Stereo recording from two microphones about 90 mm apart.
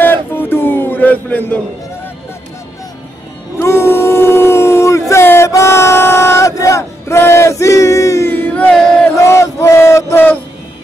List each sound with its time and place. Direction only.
0.0 s a sound: 25° left (ahead or behind)
3.5 s dog: 30° left (ahead or behind)
5.1 s a sound: 30° left (ahead or behind)
5.5 s battle cry: 30° left (ahead or behind)
8.3 s music: 20° left (ahead or behind)
9.2 s chant: 30° left (ahead or behind)